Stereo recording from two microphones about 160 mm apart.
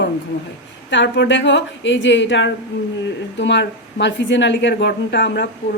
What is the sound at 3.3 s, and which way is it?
A woman's voice, 90° left.